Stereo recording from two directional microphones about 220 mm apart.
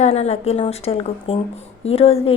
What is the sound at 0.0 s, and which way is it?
A woman's voice, 30° left (ahead or behind).